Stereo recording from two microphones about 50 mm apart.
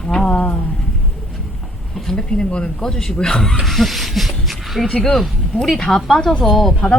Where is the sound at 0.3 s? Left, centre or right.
Left.